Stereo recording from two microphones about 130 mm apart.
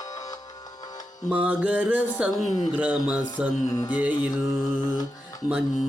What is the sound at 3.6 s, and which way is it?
Music, 25° left (ahead or behind).